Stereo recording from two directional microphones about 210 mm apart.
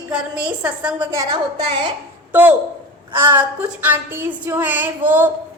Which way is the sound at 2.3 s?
10° right (ahead or behind).